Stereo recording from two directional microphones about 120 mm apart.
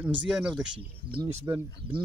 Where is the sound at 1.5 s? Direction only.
30° right (ahead or behind).